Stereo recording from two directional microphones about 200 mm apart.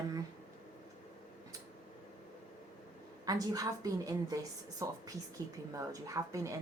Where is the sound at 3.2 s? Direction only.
20° right (ahead or behind).